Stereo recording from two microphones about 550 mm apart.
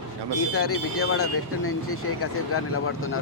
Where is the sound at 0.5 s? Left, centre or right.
Left.